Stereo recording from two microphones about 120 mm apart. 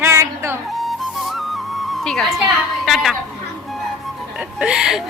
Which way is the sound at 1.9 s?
5° left (ahead or behind).